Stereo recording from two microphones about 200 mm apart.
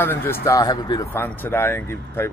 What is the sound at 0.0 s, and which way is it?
Speech, 10° left (ahead or behind).